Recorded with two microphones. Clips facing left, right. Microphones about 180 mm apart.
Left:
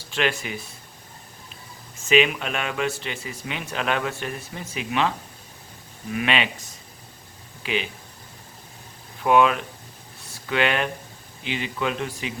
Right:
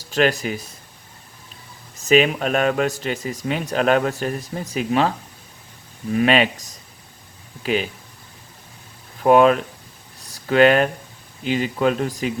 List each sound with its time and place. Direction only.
0.0 s speech: 40° right (ahead or behind)
2.0 s speech: 40° right (ahead or behind)
9.2 s speech: 40° right (ahead or behind)
10.2 s a sound: 40° right (ahead or behind)
11.4 s speech: 40° right (ahead or behind)